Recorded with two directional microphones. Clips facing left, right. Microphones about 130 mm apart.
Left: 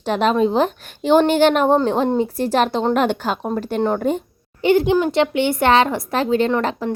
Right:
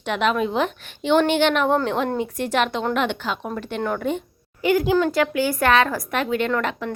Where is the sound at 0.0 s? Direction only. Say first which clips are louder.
Left 5 dB; 35° left (ahead or behind).